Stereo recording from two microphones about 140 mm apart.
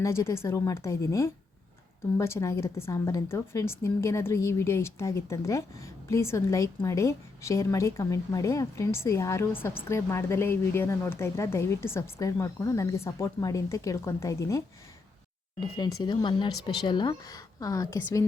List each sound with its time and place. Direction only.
0.0 s speech: 20° left (ahead or behind)
15.8 s speech: 30° left (ahead or behind)